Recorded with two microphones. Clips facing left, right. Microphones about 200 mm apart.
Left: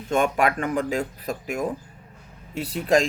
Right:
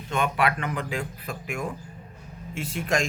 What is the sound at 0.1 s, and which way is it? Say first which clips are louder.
Speech: left 4 dB; 45° left (ahead or behind).